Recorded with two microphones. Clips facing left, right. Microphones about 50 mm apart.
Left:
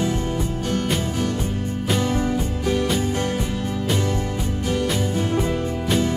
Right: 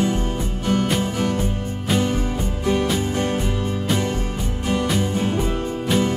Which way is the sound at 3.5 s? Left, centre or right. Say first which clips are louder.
Right 1 dB; centre.